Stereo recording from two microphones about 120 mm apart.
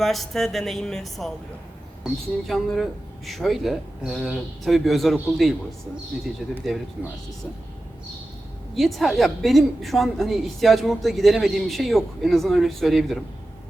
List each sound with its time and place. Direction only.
0.0 s a woman's voice: centre (ahead or behind)
8.7 s a woman's voice: centre (ahead or behind)